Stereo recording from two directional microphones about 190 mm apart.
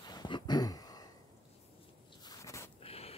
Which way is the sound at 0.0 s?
20° left (ahead or behind).